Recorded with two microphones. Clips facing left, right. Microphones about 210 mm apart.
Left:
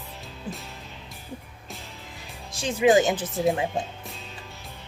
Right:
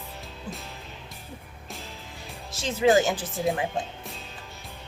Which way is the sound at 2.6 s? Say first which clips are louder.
Left 2 dB; 15° left (ahead or behind).